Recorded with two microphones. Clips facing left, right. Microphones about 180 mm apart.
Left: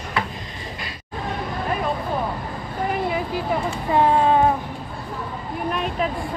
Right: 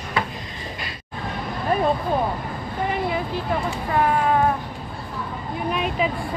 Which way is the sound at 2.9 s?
5° left (ahead or behind).